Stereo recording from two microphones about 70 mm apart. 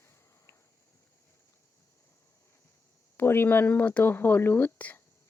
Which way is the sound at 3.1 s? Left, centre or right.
Left.